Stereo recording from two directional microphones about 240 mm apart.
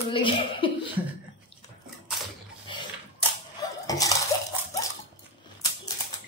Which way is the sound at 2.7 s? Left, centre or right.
Left.